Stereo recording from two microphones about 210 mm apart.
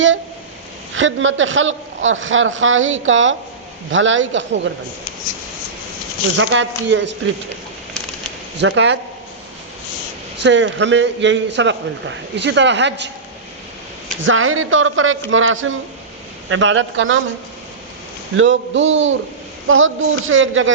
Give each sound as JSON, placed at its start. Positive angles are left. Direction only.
{"t": 0.9, "sound": "a woman's voice", "side_deg": -65}
{"t": 6.3, "sound": "a man's voice", "side_deg": -65}
{"t": 8.5, "sound": "a man's voice", "side_deg": -55}
{"t": 10.4, "sound": "a man's voice", "side_deg": -60}
{"t": 14.3, "sound": "a woman's voice", "side_deg": -75}
{"t": 18.3, "sound": "a man's voice", "side_deg": -65}